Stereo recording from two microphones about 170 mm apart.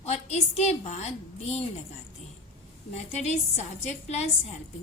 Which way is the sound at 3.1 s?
40° left (ahead or behind).